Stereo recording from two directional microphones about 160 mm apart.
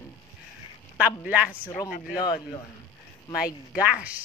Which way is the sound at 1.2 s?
10° right (ahead or behind).